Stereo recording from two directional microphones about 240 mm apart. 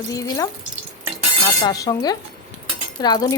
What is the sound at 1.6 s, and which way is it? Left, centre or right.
Speech, centre.